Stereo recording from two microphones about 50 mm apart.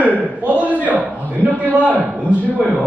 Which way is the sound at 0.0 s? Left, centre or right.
Right.